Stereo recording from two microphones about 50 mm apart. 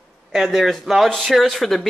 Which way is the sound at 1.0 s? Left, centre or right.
Centre.